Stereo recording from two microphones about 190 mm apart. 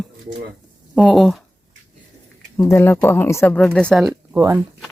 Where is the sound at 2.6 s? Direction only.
15° left (ahead or behind).